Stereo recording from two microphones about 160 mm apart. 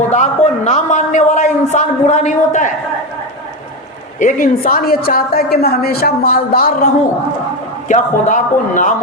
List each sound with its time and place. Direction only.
0.1 s a man's voice: 50° left (ahead or behind)
4.2 s a woman's voice: 55° left (ahead or behind)
7.9 s a man's voice: 50° left (ahead or behind)